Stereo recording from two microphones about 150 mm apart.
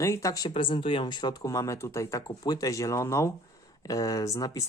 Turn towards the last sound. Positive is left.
turn(degrees=25)  # may be behind; listen again after turning